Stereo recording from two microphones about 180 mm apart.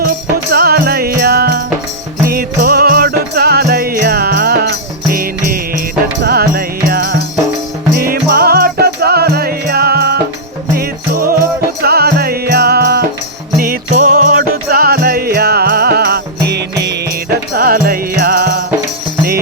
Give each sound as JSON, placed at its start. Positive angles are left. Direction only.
{"t": 0.0, "sound": "music", "side_deg": -55}
{"t": 13.6, "sound": "music", "side_deg": -50}